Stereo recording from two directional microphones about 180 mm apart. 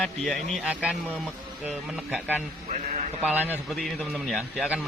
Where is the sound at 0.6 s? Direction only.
5° right (ahead or behind).